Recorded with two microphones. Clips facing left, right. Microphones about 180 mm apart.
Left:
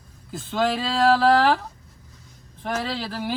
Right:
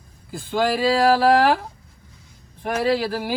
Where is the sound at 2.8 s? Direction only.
5° right (ahead or behind).